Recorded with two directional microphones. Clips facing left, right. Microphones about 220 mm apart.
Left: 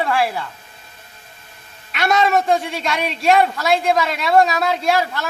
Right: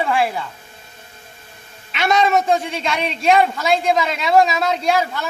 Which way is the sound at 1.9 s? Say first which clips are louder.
Even; centre (ahead or behind).